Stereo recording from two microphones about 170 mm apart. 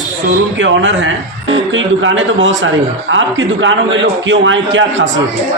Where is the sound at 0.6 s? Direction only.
90° right.